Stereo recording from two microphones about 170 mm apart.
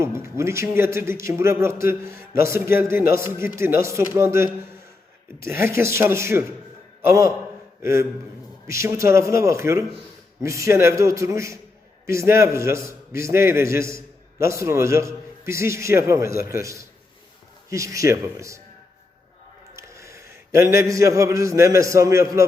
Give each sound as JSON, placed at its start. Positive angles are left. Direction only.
{"t": 0.0, "sound": "a man's voice", "side_deg": -15}
{"t": 19.7, "sound": "a sound", "side_deg": -15}
{"t": 20.6, "sound": "a man's voice", "side_deg": -15}